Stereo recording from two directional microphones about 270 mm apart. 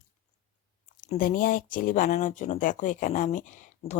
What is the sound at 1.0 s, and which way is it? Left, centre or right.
Speech, left.